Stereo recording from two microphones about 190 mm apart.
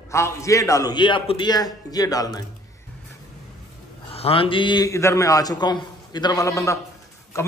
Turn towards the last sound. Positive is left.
turn(degrees=15)  # may be behind; listen again after turning